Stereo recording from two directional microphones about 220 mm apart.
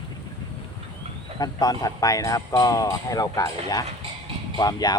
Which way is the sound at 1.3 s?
15° left (ahead or behind).